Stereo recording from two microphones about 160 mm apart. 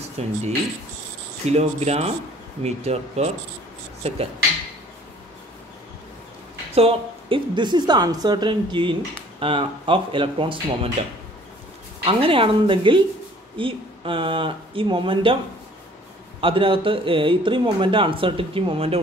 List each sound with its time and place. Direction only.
0.2 s speech: 40° right (ahead or behind)
1.4 s speech: 40° right (ahead or behind)
6.7 s a woman's voice: 40° right (ahead or behind)
16.3 s speech: 35° right (ahead or behind)